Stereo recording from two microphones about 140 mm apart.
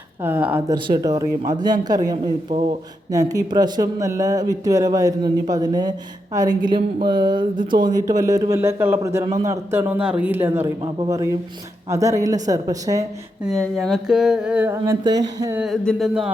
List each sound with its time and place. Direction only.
0.2 s a man's voice: 15° right (ahead or behind)
0.7 s speech: 30° right (ahead or behind)
2.5 s speech: 50° right (ahead or behind)
3.1 s a woman's voice: 25° right (ahead or behind)
11.9 s speech: 25° right (ahead or behind)
13.4 s a sound: centre (ahead or behind)
15.0 s speech: 30° right (ahead or behind)
15.5 s a sound: centre (ahead or behind)